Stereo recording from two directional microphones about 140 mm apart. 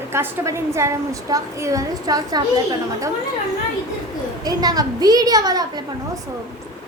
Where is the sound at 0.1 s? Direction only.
20° right (ahead or behind).